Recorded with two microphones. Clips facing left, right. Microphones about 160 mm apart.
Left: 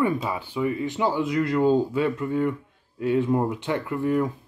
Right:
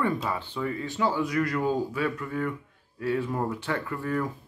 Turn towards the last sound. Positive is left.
turn(degrees=20)  # may be behind; listen again after turning